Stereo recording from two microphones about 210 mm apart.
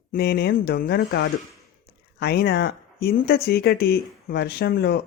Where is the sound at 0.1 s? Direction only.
50° left (ahead or behind).